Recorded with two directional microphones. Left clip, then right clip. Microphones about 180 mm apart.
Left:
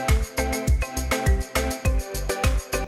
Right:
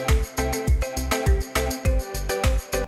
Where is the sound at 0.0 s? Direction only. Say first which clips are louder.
Even; centre (ahead or behind).